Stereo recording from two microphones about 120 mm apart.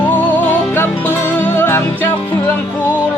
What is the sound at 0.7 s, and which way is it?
Music, 20° left (ahead or behind).